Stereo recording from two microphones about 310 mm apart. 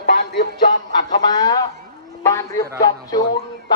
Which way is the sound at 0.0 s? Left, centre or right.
Left.